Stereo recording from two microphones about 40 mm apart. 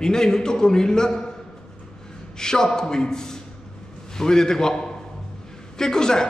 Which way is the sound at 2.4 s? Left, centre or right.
Centre.